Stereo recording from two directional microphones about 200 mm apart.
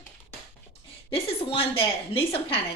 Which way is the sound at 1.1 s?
30° left (ahead or behind).